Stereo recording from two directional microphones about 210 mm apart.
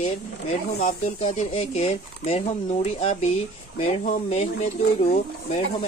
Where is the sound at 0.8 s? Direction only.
35° left (ahead or behind).